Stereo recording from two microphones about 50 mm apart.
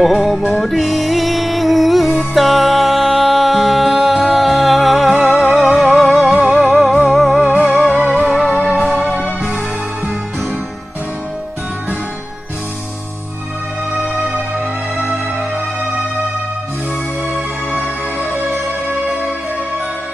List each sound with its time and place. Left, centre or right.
0.0 s music: centre
8.5 s music: centre
17.3 s music: right